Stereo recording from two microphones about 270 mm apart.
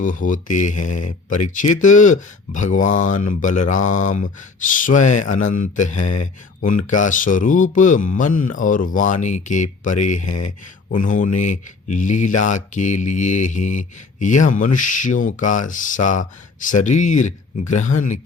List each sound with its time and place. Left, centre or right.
0.0 s speech: left
10.2 s speech: left
10.9 s speech: left